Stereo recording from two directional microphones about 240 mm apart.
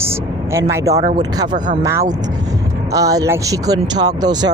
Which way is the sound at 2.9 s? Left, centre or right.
Centre.